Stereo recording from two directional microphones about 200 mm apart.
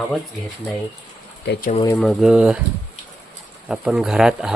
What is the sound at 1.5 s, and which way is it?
Speech, 45° left (ahead or behind).